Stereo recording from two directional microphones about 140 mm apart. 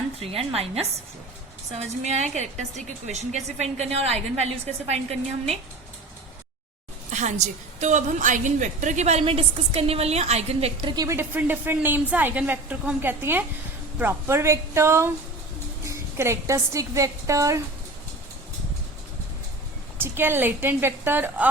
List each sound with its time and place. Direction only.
0.2 s a woman's voice: 45° right (ahead or behind)
7.1 s a woman's voice: 60° right (ahead or behind)
10.8 s a woman's voice: 25° right (ahead or behind)
20.0 s a woman's voice: 15° right (ahead or behind)